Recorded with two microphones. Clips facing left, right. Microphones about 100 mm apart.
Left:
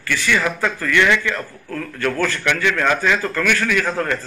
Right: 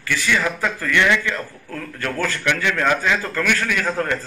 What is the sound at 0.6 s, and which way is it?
A man's voice, 20° right (ahead or behind).